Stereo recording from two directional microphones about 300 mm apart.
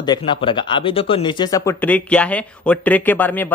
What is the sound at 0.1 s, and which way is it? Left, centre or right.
A man's voice, centre.